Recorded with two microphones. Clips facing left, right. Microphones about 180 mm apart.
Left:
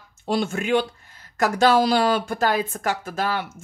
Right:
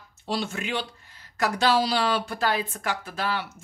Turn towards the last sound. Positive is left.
turn(degrees=45)  # may be behind; listen again after turning